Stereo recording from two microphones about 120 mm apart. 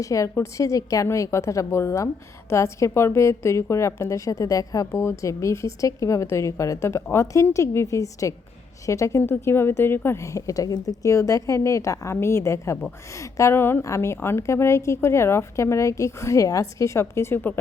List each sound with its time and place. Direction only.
0.0 s a woman's voice: 30° left (ahead or behind)